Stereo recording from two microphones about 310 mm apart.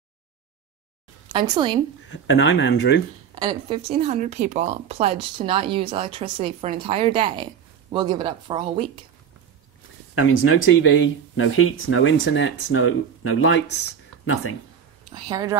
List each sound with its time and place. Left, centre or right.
1.5 s speech: centre
2.0 s speech: left
3.3 s speech: centre
10.1 s speech: left
15.0 s speech: centre